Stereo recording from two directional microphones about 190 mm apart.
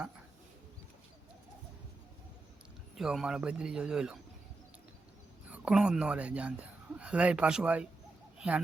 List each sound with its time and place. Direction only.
2.9 s a man's voice: centre (ahead or behind)
5.5 s speech: 5° right (ahead or behind)